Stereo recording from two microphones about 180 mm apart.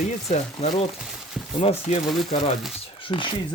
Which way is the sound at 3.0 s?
30° left (ahead or behind).